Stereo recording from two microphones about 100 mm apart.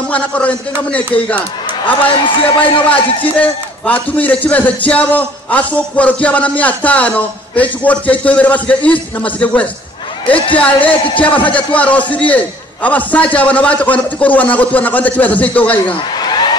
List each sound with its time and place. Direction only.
0.1 s a man's voice: 15° left (ahead or behind)
2.1 s a man's voice: 55° left (ahead or behind)
3.3 s a man's voice: 15° left (ahead or behind)
10.2 s a woman's voice: 60° left (ahead or behind)
10.5 s a man's voice: 15° left (ahead or behind)
15.9 s a sound: 50° left (ahead or behind)